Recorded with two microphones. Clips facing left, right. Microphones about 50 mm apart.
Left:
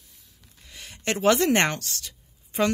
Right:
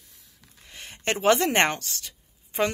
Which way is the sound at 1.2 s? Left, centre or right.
Centre.